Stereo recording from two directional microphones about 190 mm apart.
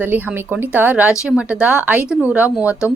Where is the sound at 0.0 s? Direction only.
10° right (ahead or behind).